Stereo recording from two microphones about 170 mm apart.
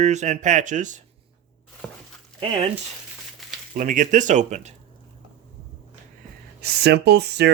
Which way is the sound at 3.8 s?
50° right (ahead or behind).